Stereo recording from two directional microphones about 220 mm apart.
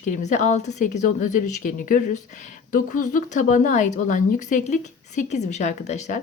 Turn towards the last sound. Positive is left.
turn(degrees=30)  # may be behind; listen again after turning